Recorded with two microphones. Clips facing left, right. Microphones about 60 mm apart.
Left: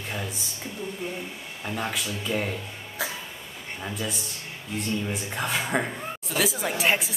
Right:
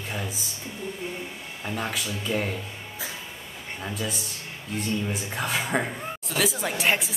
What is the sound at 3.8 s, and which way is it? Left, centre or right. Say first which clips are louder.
Speech: even; centre.